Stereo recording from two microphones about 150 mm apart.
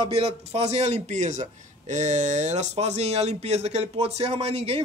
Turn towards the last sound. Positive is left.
turn(degrees=-40)  # may be behind; listen again after turning